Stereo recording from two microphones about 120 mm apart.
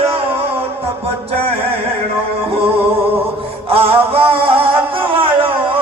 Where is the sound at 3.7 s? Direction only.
50° right (ahead or behind).